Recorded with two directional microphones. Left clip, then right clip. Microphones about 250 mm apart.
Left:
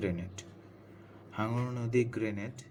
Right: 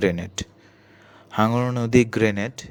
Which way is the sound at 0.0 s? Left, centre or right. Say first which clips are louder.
Right 14 dB; right.